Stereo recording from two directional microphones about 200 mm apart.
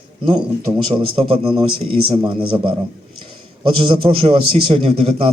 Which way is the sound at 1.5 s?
25° right (ahead or behind).